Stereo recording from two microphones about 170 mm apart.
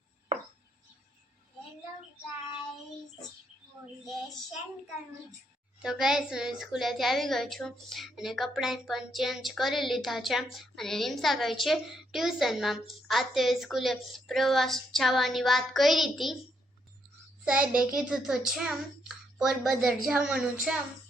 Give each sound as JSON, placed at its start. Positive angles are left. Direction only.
{"t": 5.8, "sound": "a woman's voice", "side_deg": -5}
{"t": 17.4, "sound": "a woman's voice", "side_deg": -5}